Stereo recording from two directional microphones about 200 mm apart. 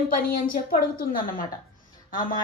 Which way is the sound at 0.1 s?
45° left (ahead or behind).